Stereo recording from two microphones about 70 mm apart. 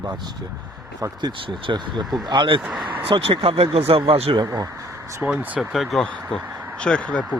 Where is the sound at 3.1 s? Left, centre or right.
Right.